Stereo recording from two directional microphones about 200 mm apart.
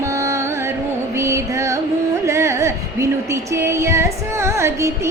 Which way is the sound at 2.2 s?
15° right (ahead or behind).